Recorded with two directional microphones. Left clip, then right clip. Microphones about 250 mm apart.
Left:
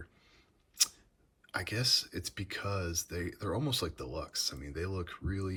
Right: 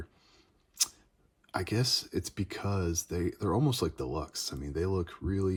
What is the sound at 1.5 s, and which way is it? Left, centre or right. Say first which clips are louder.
Speech: even; centre.